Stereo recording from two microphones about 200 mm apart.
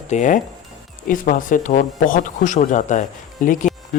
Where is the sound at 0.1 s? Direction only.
40° left (ahead or behind).